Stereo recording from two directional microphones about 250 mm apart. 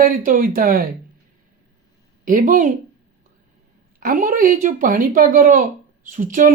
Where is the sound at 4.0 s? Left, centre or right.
Right.